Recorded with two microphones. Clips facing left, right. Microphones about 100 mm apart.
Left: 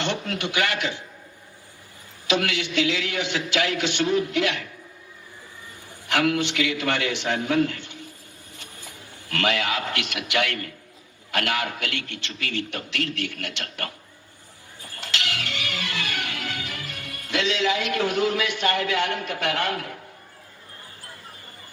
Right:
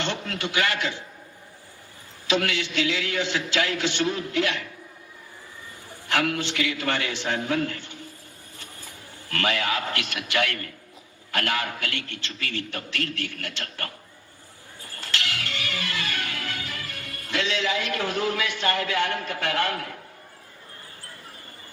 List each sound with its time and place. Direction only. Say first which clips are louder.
0.3 s a man's voice: left 1 dB; 20° left (ahead or behind)
2.3 s a man's voice: left 1 dB; 20° left (ahead or behind)
6.1 s a man's voice: left 3 dB; 20° left (ahead or behind)
9.3 s a man's voice: left 1 dB; 20° left (ahead or behind)
15.4 s music: left 1 dB; 20° left (ahead or behind)